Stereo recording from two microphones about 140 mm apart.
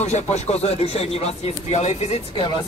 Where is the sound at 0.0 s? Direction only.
55° left (ahead or behind).